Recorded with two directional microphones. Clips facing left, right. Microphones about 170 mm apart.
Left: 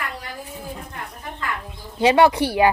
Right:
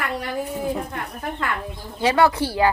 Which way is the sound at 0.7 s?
70° right (ahead or behind).